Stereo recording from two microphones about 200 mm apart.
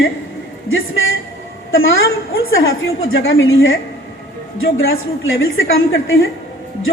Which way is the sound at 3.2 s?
75° left (ahead or behind).